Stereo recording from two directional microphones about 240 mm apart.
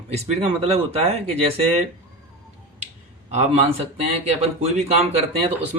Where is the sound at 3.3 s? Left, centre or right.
Right.